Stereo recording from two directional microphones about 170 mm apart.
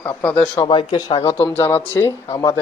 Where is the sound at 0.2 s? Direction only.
10° left (ahead or behind).